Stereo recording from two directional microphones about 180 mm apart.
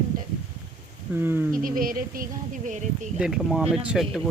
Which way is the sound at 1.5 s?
50° right (ahead or behind).